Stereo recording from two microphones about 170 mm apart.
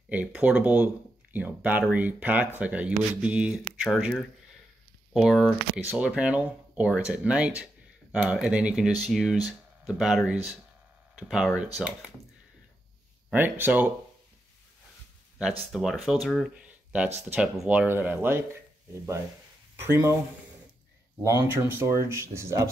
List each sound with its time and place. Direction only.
0.1 s speech: 10° right (ahead or behind)
13.3 s speech: 10° right (ahead or behind)
15.7 s speech: centre (ahead or behind)
19.8 s speech: 15° right (ahead or behind)
21.2 s speech: 15° right (ahead or behind)